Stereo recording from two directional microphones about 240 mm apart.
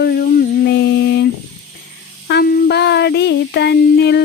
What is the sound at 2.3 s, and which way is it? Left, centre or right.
Child singing, left.